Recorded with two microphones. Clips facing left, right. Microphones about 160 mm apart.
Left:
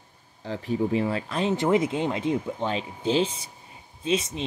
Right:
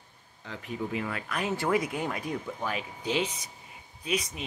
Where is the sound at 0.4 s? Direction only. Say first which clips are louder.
Left 9 dB; 35° left (ahead or behind).